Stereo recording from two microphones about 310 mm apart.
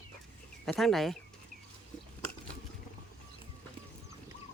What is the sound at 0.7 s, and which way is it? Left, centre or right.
Speech, centre.